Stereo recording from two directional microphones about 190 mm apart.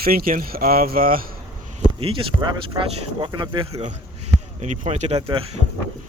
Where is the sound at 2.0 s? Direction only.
25° right (ahead or behind).